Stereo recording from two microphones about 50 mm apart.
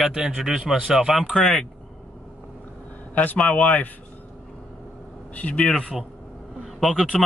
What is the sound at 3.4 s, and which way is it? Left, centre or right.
Speech, left.